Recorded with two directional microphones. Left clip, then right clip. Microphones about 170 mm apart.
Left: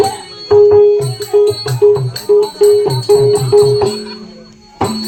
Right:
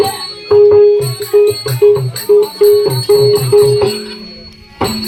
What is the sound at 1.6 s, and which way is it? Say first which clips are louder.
Music: right 1 dB; 5° left (ahead or behind).